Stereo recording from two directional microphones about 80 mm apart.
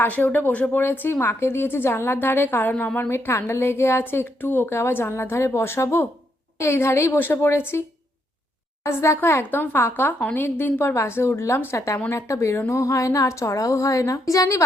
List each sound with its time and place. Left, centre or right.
0.0 s a woman's voice: left
8.8 s a woman's voice: left